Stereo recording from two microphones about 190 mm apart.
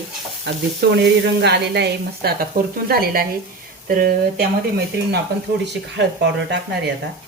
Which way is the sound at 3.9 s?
50° right (ahead or behind).